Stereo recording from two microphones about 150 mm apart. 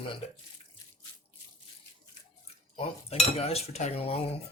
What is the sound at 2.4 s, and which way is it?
Cutlery, 40° left (ahead or behind).